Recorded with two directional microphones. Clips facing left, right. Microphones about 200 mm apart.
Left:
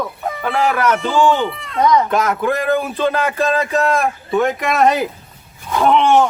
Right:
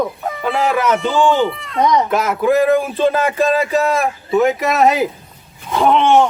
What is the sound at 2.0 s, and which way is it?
A man's voice, 5° right (ahead or behind).